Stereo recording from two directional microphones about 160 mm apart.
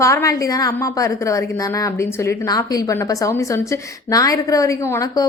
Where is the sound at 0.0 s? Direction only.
20° left (ahead or behind).